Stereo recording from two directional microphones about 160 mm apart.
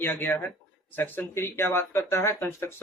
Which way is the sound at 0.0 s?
10° left (ahead or behind).